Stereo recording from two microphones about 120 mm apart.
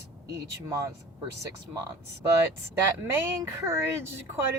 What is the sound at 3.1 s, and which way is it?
Speech, 20° right (ahead or behind).